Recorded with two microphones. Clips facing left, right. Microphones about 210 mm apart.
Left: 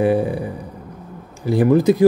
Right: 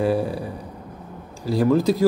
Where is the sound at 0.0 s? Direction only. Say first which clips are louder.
Left 4 dB; 20° left (ahead or behind).